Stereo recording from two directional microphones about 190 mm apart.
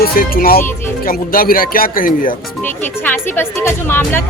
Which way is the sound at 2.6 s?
10° left (ahead or behind).